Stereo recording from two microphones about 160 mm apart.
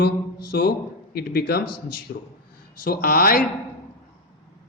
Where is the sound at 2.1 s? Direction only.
90° left.